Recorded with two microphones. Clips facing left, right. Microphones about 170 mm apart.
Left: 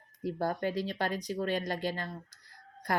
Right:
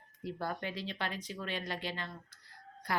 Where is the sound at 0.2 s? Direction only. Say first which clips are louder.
Left 6 dB; 40° left (ahead or behind).